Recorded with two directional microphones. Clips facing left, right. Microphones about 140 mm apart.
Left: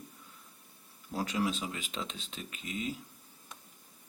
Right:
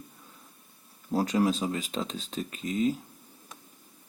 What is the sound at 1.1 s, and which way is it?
Speech, 40° right (ahead or behind).